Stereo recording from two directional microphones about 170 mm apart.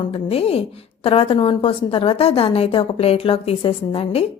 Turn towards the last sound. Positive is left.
turn(degrees=35)  # may be behind; listen again after turning